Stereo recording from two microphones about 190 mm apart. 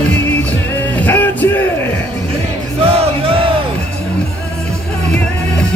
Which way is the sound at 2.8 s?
30° right (ahead or behind).